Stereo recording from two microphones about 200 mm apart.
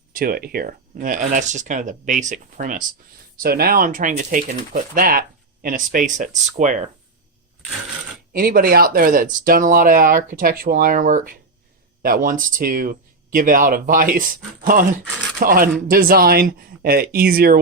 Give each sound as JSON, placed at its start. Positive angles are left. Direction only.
{"t": 0.1, "sound": "speech", "side_deg": -45}
{"t": 8.3, "sound": "speech", "side_deg": -45}